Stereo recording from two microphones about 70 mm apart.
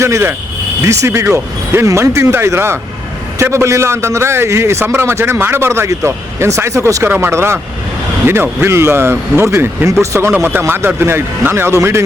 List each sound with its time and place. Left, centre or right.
0.0 s a man's voice: right
10.3 s a man's voice: right